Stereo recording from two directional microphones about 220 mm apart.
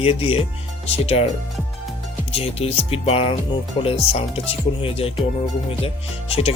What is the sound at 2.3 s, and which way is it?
Music, 25° left (ahead or behind).